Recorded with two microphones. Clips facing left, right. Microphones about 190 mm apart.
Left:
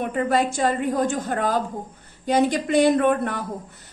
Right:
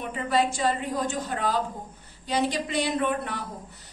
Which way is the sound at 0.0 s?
50° left (ahead or behind).